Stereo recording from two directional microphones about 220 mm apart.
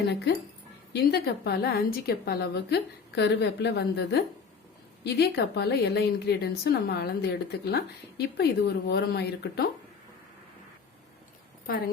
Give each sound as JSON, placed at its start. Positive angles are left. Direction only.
{"t": 1.0, "sound": "a woman's voice", "side_deg": 45}